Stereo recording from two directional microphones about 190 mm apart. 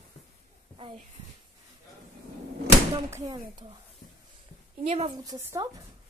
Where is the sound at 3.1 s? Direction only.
15° right (ahead or behind).